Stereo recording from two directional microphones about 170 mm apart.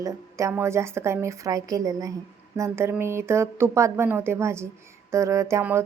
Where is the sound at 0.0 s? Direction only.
20° right (ahead or behind).